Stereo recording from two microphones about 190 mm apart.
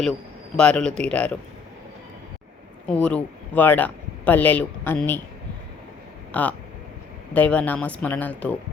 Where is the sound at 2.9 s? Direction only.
5° left (ahead or behind).